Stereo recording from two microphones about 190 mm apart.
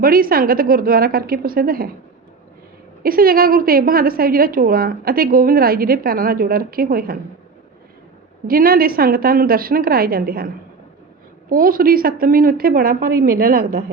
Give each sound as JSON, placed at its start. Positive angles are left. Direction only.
{"t": 0.0, "sound": "a woman's voice", "side_deg": -50}
{"t": 3.0, "sound": "a woman's voice", "side_deg": -50}
{"t": 8.4, "sound": "a woman's voice", "side_deg": -50}